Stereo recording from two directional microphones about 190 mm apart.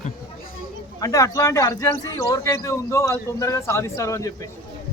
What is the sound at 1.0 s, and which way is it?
A man's voice, 20° left (ahead or behind).